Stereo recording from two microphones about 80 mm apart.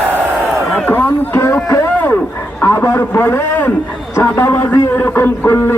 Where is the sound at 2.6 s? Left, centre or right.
Left.